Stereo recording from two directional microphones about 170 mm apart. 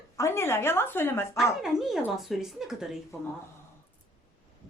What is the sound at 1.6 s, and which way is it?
Speech, centre (ahead or behind).